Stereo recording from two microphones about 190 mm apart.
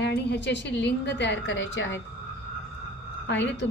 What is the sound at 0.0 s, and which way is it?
A woman's voice, 60° left (ahead or behind).